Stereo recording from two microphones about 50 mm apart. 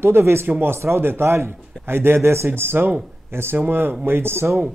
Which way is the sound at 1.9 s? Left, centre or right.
Right.